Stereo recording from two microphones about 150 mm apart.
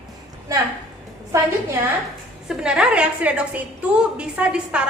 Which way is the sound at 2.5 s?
5° right (ahead or behind).